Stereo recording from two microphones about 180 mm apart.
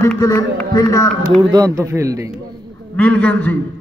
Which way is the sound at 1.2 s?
20° right (ahead or behind).